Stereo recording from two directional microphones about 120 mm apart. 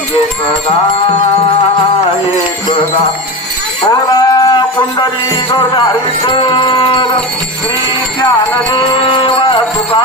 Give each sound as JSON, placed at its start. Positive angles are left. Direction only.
{"t": 4.1, "sound": "livestock", "side_deg": 30}
{"t": 6.2, "sound": "music", "side_deg": 40}
{"t": 8.7, "sound": "music", "side_deg": 40}